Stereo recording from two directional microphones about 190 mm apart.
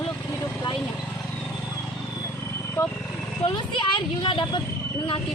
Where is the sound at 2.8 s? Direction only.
10° left (ahead or behind).